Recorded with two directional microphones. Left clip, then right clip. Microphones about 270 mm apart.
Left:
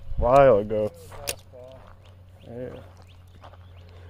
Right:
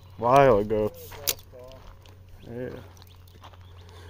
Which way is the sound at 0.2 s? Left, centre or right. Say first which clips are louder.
Left 2 dB; centre.